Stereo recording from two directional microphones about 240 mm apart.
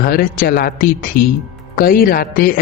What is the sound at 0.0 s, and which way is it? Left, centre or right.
A man's voice, left.